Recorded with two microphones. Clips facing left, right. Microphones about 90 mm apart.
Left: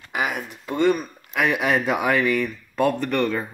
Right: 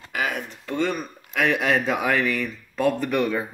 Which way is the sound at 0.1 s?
15° left (ahead or behind).